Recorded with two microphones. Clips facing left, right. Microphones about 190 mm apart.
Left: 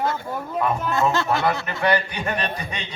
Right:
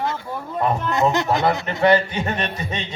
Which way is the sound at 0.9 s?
20° right (ahead or behind).